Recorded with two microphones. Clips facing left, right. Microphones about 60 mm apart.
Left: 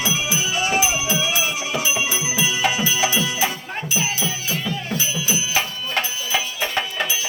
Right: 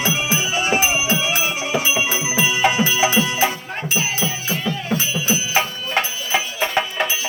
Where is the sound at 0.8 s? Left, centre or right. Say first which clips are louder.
Right 2 dB; right.